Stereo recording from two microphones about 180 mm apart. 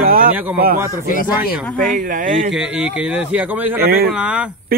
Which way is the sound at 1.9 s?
45° right (ahead or behind).